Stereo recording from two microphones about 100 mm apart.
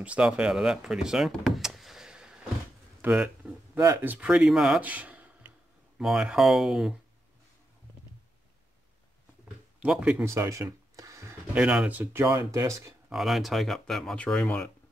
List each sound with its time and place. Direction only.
0.0 s speech: 15° right (ahead or behind)
3.0 s speech: 20° right (ahead or behind)
4.3 s speech: 5° right (ahead or behind)
4.8 s a sound: 15° right (ahead or behind)
5.9 s speech: 5° right (ahead or behind)
9.8 s speech: 10° right (ahead or behind)
10.2 s cash register: 30° right (ahead or behind)
11.5 s speech: 10° right (ahead or behind)
12.3 s speech: 35° right (ahead or behind)
13.1 s speech: centre (ahead or behind)